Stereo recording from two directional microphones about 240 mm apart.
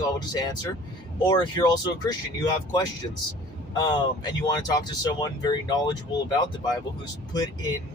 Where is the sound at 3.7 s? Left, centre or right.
Centre.